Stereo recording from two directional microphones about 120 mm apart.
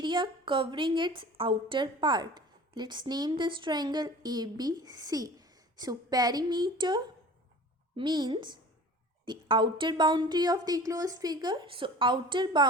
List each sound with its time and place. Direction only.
0.0 s a woman's voice: 40° right (ahead or behind)